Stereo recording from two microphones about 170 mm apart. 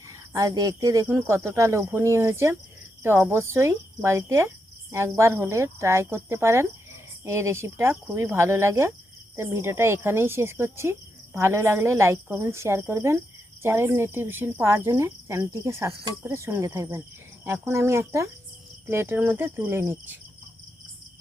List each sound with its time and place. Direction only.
0.1 s speech: 20° right (ahead or behind)